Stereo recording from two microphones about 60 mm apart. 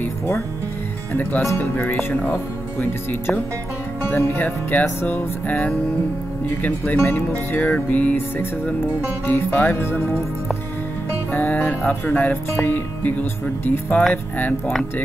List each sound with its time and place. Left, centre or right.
1.6 s speech: left
9.2 s speech: left
11.3 s speech: left